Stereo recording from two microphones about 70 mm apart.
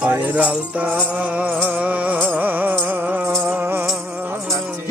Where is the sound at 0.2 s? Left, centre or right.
Right.